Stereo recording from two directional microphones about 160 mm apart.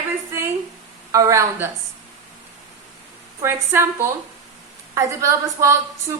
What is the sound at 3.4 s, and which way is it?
A woman's voice, 15° right (ahead or behind).